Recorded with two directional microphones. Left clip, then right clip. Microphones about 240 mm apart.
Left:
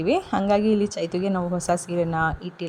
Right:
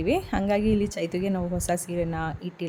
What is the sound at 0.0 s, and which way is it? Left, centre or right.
A woman's voice, centre.